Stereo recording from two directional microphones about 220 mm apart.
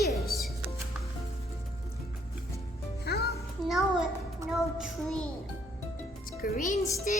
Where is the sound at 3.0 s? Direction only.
45° left (ahead or behind).